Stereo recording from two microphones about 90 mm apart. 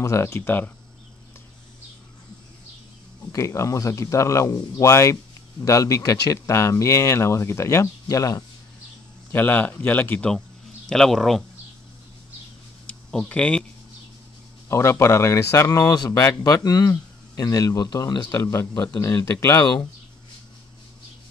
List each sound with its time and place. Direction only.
0.0 s speech: 35° left (ahead or behind)
3.3 s speech: 35° left (ahead or behind)
9.3 s speech: 20° left (ahead or behind)
10.9 s speech: 5° left (ahead or behind)
12.8 s a sound: 10° left (ahead or behind)
14.7 s speech: 30° left (ahead or behind)
15.8 s speech: 45° left (ahead or behind)
16.1 s speech: 35° left (ahead or behind); by 18.2 s 50° left (ahead or behind)
18.2 s speech: 30° left (ahead or behind)